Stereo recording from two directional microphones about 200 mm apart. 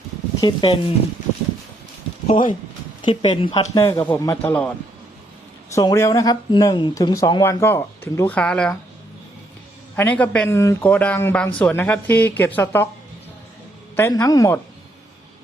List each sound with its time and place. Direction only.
0.4 s speech: 25° left (ahead or behind)
2.2 s speech: 25° left (ahead or behind); by 4.7 s 10° left (ahead or behind)
5.7 s speech: 15° left (ahead or behind)
9.9 s speech: 10° left (ahead or behind)
13.9 s speech: 10° left (ahead or behind)